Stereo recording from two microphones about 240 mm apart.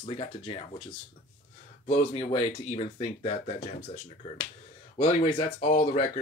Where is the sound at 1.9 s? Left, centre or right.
Left.